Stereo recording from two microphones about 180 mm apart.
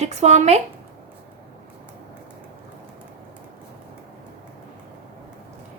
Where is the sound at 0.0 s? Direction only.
40° right (ahead or behind).